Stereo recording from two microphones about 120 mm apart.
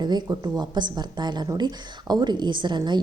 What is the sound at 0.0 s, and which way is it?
A woman's voice, 35° right (ahead or behind).